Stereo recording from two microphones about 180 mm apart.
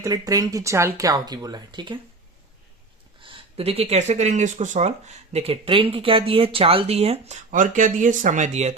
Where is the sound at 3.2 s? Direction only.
35° right (ahead or behind).